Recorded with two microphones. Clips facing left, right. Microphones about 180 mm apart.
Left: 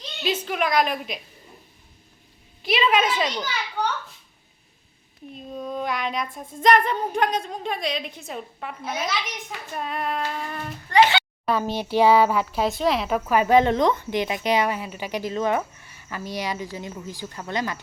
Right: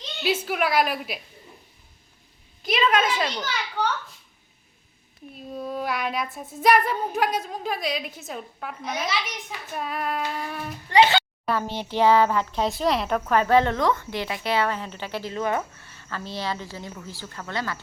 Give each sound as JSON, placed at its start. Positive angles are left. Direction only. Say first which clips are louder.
{"t": 0.2, "sound": "a woman's voice", "louder": "right 1 dB", "side_deg": -10}
{"t": 2.6, "sound": "child singing", "louder": "left 1 dB", "side_deg": 0}
{"t": 5.3, "sound": "child singing", "louder": "even", "side_deg": -5}
{"t": 10.8, "sound": "a child's voice", "louder": "even", "side_deg": -20}
{"t": 11.5, "sound": "a child's voice", "louder": "left 4 dB", "side_deg": 15}